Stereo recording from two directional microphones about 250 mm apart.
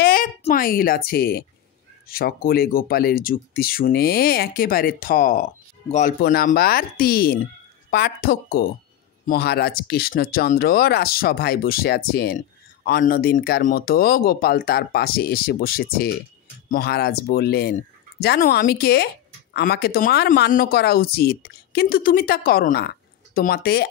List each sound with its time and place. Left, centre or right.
0.0 s speech: left